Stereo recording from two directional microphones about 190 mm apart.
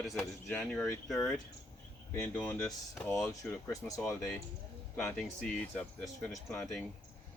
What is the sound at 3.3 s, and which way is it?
Speech, 15° left (ahead or behind).